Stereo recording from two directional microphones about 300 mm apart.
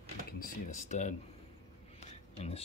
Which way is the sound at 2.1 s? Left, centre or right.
Centre.